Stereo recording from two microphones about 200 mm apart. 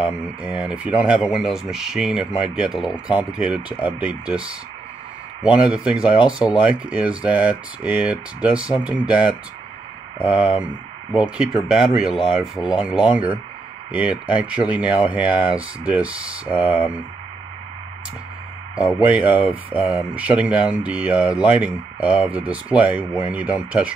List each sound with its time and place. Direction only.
0.0 s speech: 5° right (ahead or behind)
18.8 s speech: 5° right (ahead or behind)